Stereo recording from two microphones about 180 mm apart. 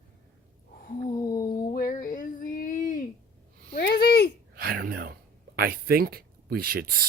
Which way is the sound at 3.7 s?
60° left (ahead or behind).